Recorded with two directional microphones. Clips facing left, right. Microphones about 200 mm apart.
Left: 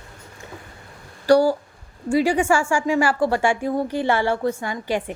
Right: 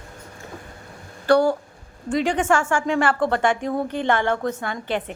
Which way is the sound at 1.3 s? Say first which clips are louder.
Left 2 dB; 10° left (ahead or behind).